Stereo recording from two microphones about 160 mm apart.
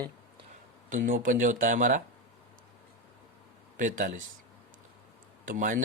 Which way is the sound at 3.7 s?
55° right (ahead or behind).